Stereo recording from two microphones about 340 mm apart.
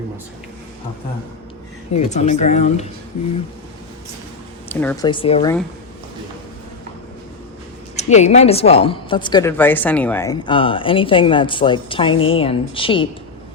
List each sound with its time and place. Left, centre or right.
1.9 s speech: centre
4.7 s a woman's voice: centre
7.9 s a woman's voice: centre